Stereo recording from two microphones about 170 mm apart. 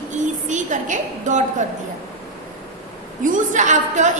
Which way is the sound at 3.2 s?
50° right (ahead or behind).